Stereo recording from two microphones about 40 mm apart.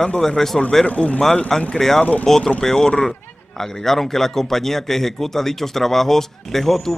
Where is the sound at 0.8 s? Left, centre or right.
Left.